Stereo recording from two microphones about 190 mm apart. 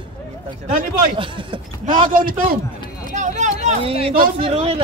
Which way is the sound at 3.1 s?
40° right (ahead or behind).